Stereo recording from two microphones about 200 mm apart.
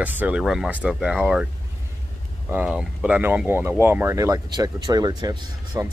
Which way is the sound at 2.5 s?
5° right (ahead or behind).